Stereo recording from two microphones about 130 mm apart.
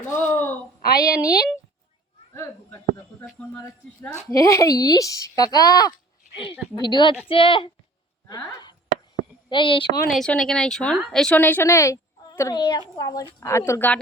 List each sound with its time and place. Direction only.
0.0 s a sound: 15° left (ahead or behind)
0.9 s a woman's voice: 30° left (ahead or behind)
2.3 s a sound: 20° left (ahead or behind)
4.3 s a woman's voice: 25° left (ahead or behind); by 7.7 s 40° left (ahead or behind)
8.3 s speech: 30° left (ahead or behind)
10.1 s a woman's voice: 5° left (ahead or behind)